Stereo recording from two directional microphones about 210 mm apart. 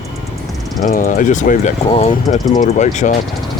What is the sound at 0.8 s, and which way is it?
Speech, 40° left (ahead or behind).